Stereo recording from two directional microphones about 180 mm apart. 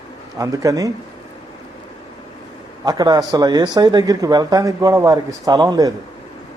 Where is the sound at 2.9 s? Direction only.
20° right (ahead or behind).